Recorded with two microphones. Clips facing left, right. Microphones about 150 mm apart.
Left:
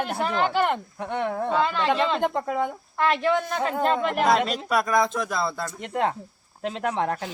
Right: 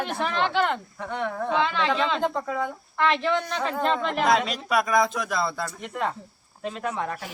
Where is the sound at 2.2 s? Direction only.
15° left (ahead or behind); by 5.7 s centre (ahead or behind).